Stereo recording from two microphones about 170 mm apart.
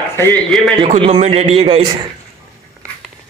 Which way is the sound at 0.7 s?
35° right (ahead or behind).